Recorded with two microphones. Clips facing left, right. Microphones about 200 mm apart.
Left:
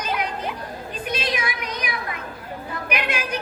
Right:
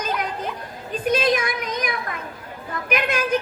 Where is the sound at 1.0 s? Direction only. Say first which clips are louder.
Right 7 dB; 45° right (ahead or behind).